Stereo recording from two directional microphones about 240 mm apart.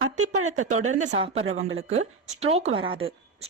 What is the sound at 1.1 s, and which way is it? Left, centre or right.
Speech, right.